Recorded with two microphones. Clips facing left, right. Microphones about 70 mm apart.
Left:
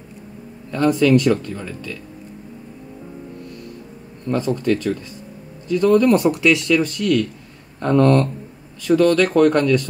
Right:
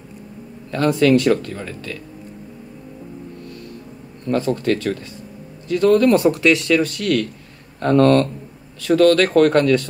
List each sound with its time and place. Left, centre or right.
0.7 s speech: right
4.3 s speech: right